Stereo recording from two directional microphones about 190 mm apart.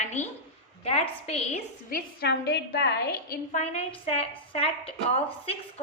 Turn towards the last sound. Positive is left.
turn(degrees=30)  # may be behind; listen again after turning